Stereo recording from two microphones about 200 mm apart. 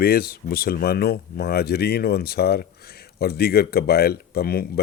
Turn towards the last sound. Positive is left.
turn(degrees=50)  # may be behind; listen again after turning